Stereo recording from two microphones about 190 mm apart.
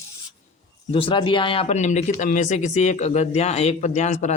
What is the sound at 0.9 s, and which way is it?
Speech, 30° left (ahead or behind).